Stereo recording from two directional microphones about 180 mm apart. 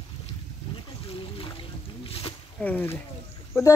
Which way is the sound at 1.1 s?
30° left (ahead or behind).